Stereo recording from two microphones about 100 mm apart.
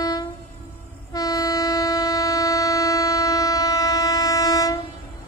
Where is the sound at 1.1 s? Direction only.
40° left (ahead or behind).